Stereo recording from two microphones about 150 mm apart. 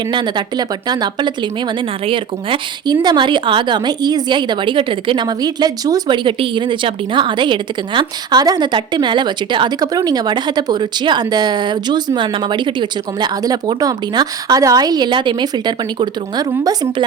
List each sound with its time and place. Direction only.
0.1 s speech: 30° right (ahead or behind)